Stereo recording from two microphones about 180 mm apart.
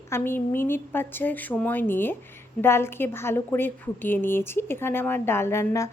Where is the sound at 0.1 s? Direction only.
10° left (ahead or behind).